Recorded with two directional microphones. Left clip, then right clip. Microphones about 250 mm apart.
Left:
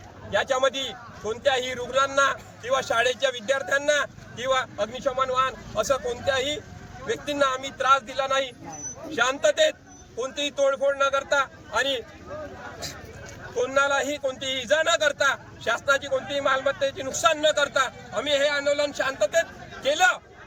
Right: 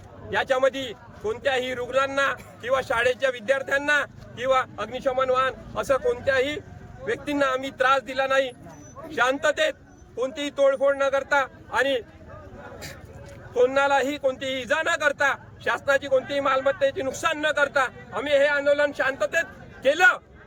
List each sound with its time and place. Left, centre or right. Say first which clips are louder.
0.3 s a man's voice: right 1 dB; centre
13.6 s a man's voice: right 3 dB; centre